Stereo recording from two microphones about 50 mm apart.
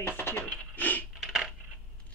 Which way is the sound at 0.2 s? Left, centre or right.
Left.